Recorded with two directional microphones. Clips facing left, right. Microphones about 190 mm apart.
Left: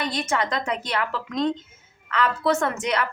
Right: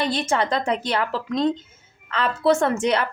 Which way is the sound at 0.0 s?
30° right (ahead or behind).